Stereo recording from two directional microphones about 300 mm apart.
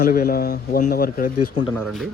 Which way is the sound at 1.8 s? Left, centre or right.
Centre.